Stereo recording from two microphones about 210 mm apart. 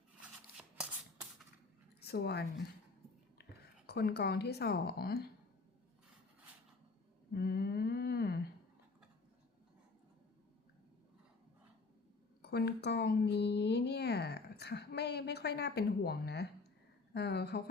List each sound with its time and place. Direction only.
0.2 s scissors: 5° right (ahead or behind)
2.0 s a woman's voice: 50° left (ahead or behind)
3.8 s speech: 50° left (ahead or behind)
7.3 s humming: 50° left (ahead or behind)
12.4 s speech: 50° left (ahead or behind)